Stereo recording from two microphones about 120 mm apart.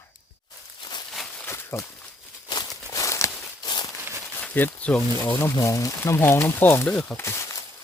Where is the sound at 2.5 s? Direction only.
30° left (ahead or behind).